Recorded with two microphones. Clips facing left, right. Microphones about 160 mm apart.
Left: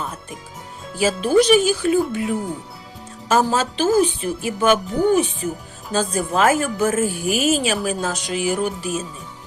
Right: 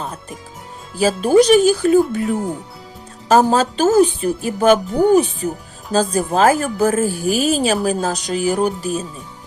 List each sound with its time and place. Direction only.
0.9 s speech: 40° right (ahead or behind)